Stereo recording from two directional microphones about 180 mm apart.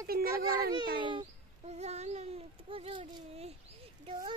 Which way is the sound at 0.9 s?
25° right (ahead or behind).